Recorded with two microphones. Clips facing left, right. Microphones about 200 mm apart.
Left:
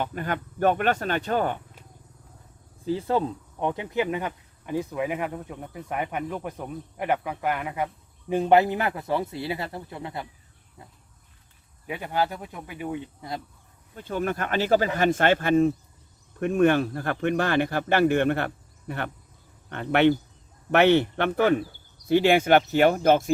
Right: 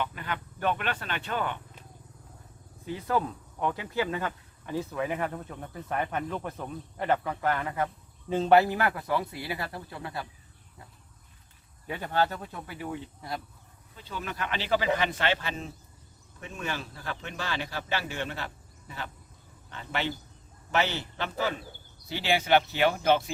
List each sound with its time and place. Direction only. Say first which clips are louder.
0.0 s speech: left 5 dB; 45° left (ahead or behind)
2.8 s a man's voice: left 5 dB; 30° left (ahead or behind)
11.9 s speech: left 1 dB; 10° left (ahead or behind)
13.9 s speech: left 10 dB; 50° left (ahead or behind)